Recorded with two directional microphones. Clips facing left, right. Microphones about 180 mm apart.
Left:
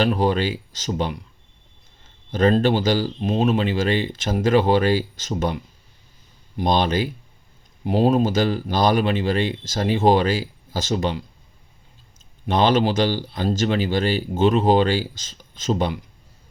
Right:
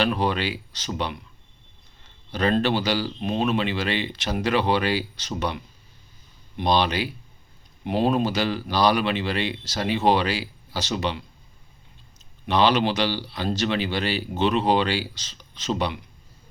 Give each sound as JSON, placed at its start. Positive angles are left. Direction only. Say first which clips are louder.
{"t": 0.0, "sound": "speech", "louder": "left 4 dB", "side_deg": 40}
{"t": 2.3, "sound": "speech", "louder": "left 4 dB", "side_deg": 45}
{"t": 3.2, "sound": "speech", "louder": "left 4 dB", "side_deg": 30}
{"t": 6.6, "sound": "speech", "louder": "left 2 dB", "side_deg": 45}
{"t": 12.5, "sound": "speech", "louder": "left 2 dB", "side_deg": 45}